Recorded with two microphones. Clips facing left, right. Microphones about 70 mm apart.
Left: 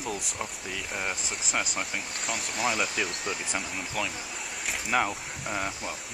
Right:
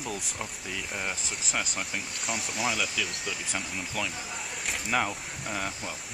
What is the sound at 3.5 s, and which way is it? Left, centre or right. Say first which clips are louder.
Speech: left 1 dB; centre.